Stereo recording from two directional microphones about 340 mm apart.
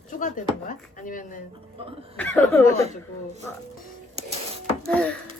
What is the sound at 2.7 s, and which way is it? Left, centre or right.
Speech, centre.